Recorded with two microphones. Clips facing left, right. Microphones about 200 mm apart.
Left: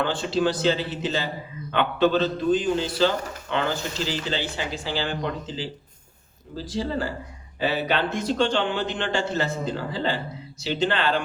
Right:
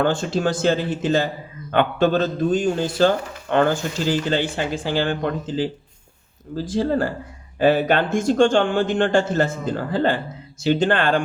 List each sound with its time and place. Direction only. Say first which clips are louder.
0.0 s a man's voice: right 3 dB; 45° right (ahead or behind)